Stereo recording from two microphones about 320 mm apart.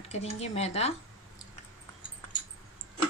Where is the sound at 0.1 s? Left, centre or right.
Centre.